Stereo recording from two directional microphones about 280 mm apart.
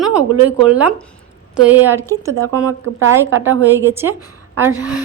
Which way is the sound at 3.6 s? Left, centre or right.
Centre.